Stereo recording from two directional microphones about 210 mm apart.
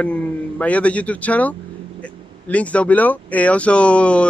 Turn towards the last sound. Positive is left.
turn(degrees=5)  # may be behind; listen again after turning